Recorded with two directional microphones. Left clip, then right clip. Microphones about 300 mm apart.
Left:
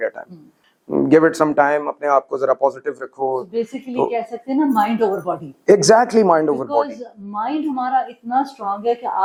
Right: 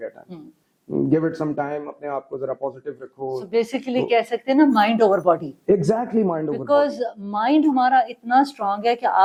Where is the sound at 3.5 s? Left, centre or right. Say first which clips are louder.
Right 2 dB; centre.